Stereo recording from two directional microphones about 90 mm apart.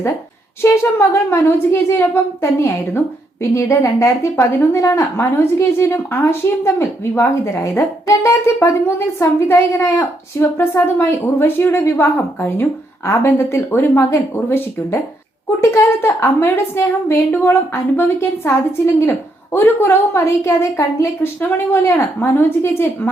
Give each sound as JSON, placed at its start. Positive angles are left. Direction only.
{"t": 0.6, "sound": "a woman's voice", "side_deg": 25}